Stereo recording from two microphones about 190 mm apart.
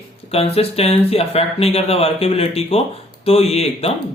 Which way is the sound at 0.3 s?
30° left (ahead or behind).